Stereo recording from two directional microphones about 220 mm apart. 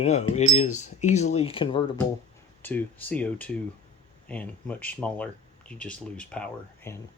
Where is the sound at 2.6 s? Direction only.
10° left (ahead or behind).